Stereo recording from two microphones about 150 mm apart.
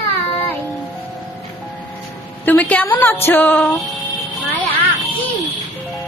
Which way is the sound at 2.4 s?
10° left (ahead or behind).